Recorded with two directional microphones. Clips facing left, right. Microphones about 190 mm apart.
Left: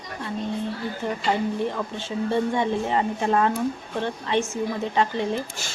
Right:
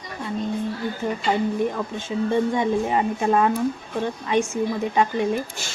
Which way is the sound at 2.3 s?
15° right (ahead or behind).